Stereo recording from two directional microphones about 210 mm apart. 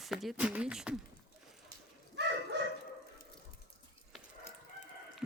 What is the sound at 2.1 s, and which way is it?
Bow-wow, 55° right (ahead or behind).